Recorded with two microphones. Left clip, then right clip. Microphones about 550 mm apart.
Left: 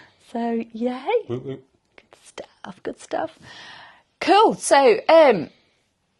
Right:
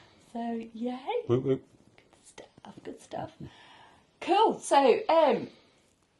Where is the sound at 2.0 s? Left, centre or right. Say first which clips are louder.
Left 12 dB; left.